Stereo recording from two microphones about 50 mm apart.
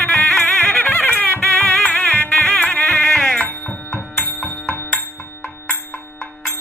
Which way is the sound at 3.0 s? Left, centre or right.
Centre.